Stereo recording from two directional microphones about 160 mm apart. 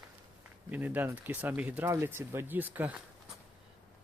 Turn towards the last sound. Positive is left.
turn(degrees=-10)  # may be behind; listen again after turning